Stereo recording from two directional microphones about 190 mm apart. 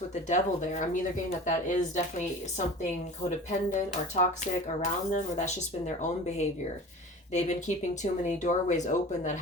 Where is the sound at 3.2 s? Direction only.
40° left (ahead or behind).